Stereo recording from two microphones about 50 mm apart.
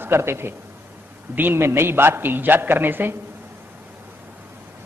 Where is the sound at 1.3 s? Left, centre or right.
Right.